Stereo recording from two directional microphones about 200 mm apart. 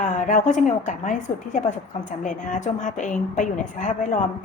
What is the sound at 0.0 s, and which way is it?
A woman's voice, 40° left (ahead or behind).